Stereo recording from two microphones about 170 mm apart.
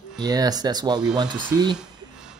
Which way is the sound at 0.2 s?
25° right (ahead or behind).